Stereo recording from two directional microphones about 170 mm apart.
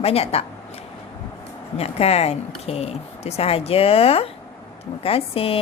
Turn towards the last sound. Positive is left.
turn(degrees=35)  # may be behind; listen again after turning